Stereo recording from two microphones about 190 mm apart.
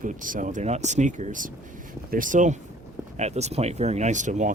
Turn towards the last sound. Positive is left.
turn(degrees=-40)  # may be behind; listen again after turning